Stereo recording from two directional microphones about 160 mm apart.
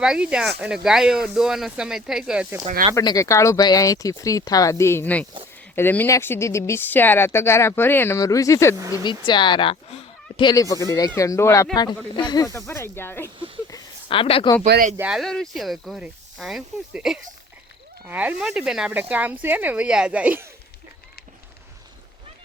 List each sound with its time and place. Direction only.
0.0 s speech: 5° right (ahead or behind)
2.9 s speech: 25° left (ahead or behind)
13.7 s a sound: 25° left (ahead or behind)
14.2 s speech: 35° left (ahead or behind)
14.9 s speech: 5° right (ahead or behind)